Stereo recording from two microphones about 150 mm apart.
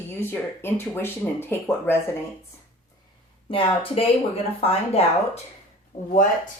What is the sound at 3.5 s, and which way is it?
Speech, 35° left (ahead or behind).